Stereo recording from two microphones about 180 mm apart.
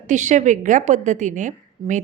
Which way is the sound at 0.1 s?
40° right (ahead or behind).